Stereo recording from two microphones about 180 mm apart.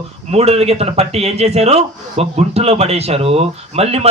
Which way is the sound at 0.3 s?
35° right (ahead or behind).